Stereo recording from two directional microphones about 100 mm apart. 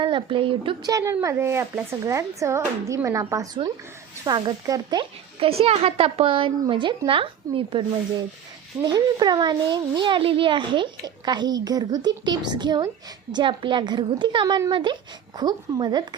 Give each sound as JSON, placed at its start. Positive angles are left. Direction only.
{"t": 0.0, "sound": "speech", "side_deg": -55}
{"t": 0.9, "sound": "a woman's voice", "side_deg": -35}
{"t": 4.3, "sound": "a child's voice", "side_deg": -45}
{"t": 5.4, "sound": "a woman's voice", "side_deg": -80}
{"t": 8.9, "sound": "a child's voice", "side_deg": -45}
{"t": 15.4, "sound": "a child's voice", "side_deg": -45}